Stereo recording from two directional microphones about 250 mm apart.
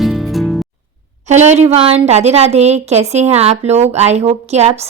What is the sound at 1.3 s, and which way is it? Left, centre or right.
Speech, right.